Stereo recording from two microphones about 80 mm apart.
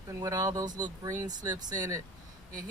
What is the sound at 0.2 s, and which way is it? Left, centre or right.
Speech, right.